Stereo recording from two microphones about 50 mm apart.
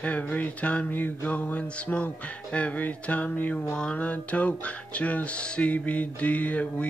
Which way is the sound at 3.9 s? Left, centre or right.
Left.